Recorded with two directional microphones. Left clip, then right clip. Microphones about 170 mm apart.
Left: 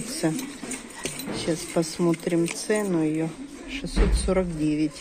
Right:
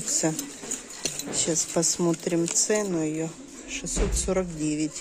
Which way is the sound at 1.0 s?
30° right (ahead or behind).